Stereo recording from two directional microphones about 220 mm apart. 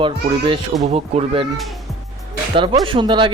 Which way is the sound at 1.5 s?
Centre (ahead or behind).